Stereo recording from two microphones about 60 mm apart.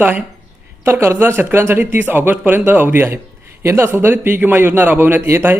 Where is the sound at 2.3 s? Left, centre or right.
Right.